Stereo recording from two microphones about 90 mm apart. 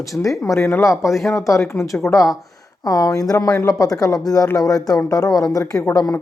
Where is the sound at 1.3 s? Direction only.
35° left (ahead or behind).